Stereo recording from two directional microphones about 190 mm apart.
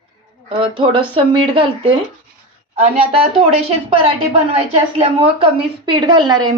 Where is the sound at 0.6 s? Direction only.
25° right (ahead or behind).